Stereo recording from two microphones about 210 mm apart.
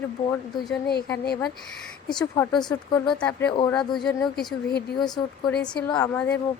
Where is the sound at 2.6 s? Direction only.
20° left (ahead or behind).